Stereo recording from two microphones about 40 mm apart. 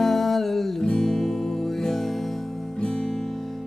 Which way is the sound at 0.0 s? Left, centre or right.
Centre.